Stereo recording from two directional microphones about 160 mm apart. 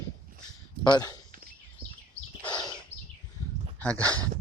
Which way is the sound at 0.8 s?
20° left (ahead or behind).